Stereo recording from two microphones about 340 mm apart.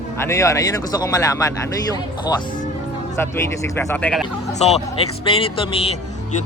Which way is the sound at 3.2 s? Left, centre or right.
Centre.